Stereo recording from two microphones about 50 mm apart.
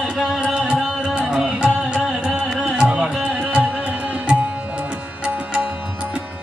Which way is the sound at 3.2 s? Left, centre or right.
Centre.